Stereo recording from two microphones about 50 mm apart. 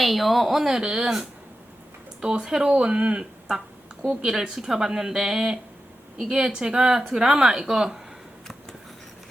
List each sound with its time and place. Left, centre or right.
0.0 s speech: centre
2.4 s speech: centre